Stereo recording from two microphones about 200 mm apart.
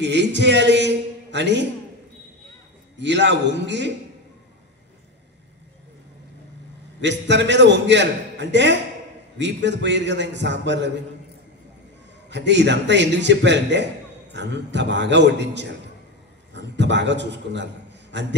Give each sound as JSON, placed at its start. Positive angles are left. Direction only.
{"t": 0.0, "sound": "a man's voice", "side_deg": -60}
{"t": 3.0, "sound": "a man's voice", "side_deg": -60}
{"t": 7.0, "sound": "a man's voice", "side_deg": -60}
{"t": 12.3, "sound": "a man's voice", "side_deg": -60}